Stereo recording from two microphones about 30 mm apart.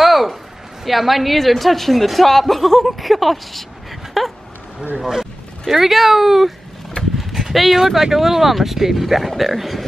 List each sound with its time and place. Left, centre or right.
0.0 s a sound: centre
0.8 s a woman's voice: centre
5.0 s speech: centre
7.0 s vehicle: left
7.5 s a woman's voice: centre